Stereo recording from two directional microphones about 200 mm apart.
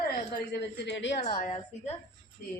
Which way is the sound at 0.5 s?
60° left (ahead or behind).